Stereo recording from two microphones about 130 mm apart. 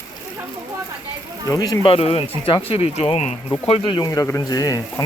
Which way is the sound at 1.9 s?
45° left (ahead or behind).